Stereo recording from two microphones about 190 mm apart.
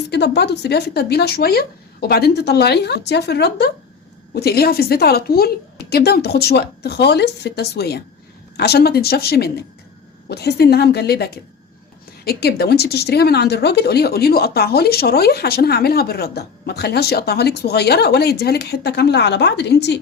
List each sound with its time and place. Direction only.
0.1 s a woman's voice: 60° left (ahead or behind)